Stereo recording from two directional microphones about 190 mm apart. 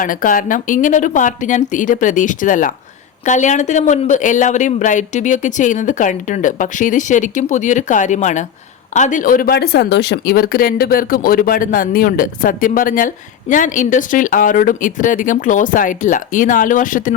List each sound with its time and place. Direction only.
0.0 s speech: 45° left (ahead or behind)